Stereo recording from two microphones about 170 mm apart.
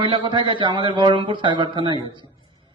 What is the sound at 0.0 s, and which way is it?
A man's voice, 30° right (ahead or behind).